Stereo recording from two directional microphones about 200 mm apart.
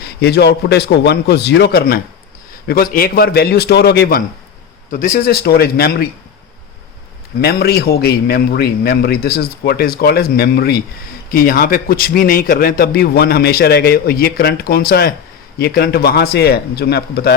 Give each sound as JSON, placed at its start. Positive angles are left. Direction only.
{"t": 0.0, "sound": "a man's voice", "side_deg": 55}
{"t": 4.9, "sound": "a man's voice", "side_deg": 45}
{"t": 7.4, "sound": "a man's voice", "side_deg": 50}